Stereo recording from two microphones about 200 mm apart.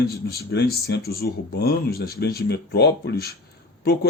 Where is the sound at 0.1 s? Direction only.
50° left (ahead or behind).